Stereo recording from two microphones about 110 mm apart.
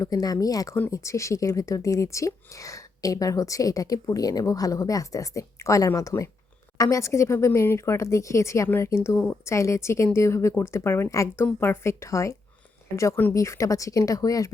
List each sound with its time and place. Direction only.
0.0 s speech: 35° left (ahead or behind)